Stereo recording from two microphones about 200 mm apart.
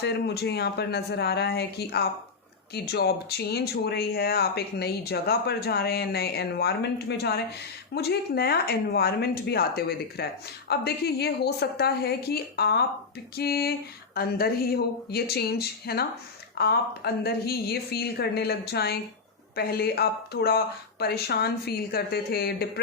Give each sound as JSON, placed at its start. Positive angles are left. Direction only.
{"t": 0.0, "sound": "speech", "side_deg": 55}